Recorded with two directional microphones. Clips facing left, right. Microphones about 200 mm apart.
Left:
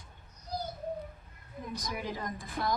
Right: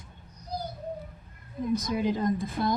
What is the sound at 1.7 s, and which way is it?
A woman's voice, 25° right (ahead or behind).